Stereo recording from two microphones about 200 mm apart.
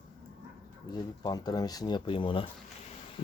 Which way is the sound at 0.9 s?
20° left (ahead or behind).